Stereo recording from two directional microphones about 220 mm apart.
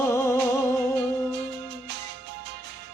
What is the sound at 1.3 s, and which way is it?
Music, 50° right (ahead or behind).